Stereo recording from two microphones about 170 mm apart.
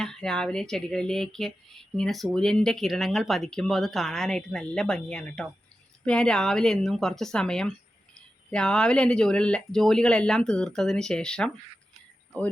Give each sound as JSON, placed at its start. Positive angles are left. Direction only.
{"t": 0.0, "sound": "speech", "side_deg": 5}